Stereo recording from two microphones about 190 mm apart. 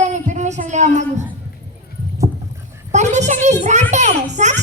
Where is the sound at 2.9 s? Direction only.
40° right (ahead or behind).